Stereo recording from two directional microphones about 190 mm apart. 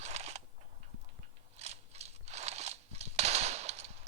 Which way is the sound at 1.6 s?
35° right (ahead or behind).